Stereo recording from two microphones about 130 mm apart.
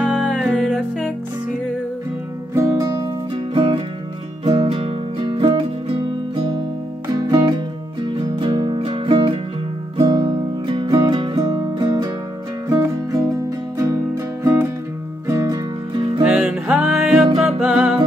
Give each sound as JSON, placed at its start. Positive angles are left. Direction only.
{"t": 0.1, "sound": "music", "side_deg": 0}
{"t": 2.5, "sound": "music", "side_deg": -20}
{"t": 3.5, "sound": "music", "side_deg": -40}
{"t": 16.3, "sound": "music", "side_deg": -10}